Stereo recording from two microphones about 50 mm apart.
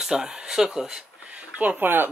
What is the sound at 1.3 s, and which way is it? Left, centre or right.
Speech, right.